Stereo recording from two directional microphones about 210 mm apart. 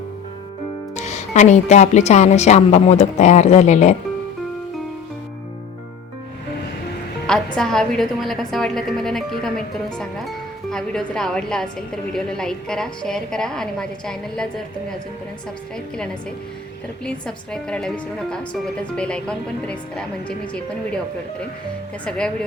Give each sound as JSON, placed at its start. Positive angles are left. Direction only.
{"t": 0.9, "sound": "speech", "side_deg": 35}
{"t": 7.3, "sound": "a woman's voice", "side_deg": 5}
{"t": 17.1, "sound": "a woman's voice", "side_deg": 5}